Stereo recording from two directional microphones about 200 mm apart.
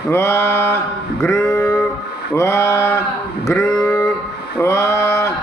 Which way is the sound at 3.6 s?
15° left (ahead or behind).